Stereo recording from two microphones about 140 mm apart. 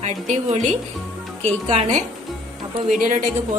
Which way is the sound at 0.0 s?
60° right (ahead or behind).